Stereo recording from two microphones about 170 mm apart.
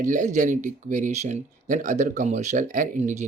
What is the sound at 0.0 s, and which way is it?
Speech, 50° right (ahead or behind).